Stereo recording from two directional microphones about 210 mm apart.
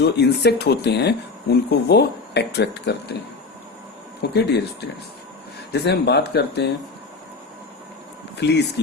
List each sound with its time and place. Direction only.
0.0 s speech: 50° left (ahead or behind)
4.2 s speech: 50° left (ahead or behind)
8.4 s speech: 55° left (ahead or behind)